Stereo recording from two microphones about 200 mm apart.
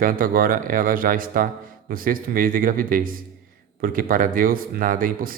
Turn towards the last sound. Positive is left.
turn(degrees=-45)  # may be behind; listen again after turning